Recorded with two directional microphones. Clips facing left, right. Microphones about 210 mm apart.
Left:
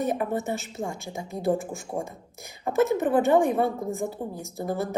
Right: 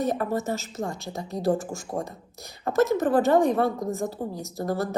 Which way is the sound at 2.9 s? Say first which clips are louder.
Even; 15° left (ahead or behind).